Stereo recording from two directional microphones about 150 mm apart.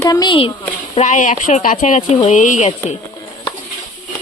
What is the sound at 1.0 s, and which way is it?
Speech, 55° left (ahead or behind).